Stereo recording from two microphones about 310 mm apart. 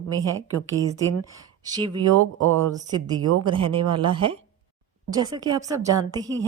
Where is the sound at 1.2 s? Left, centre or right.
Centre.